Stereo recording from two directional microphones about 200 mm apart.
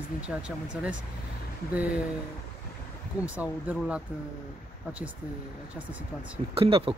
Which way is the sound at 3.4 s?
5° right (ahead or behind).